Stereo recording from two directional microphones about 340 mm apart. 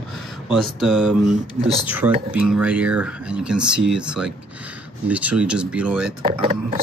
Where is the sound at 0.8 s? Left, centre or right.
Centre.